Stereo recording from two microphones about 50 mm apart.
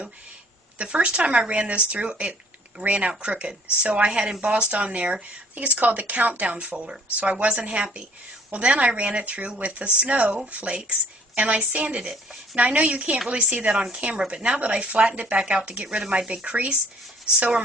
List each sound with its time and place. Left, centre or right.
0.8 s speech: right
11.9 s speech: right